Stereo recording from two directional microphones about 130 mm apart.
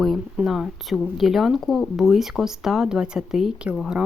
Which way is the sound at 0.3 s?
5° right (ahead or behind).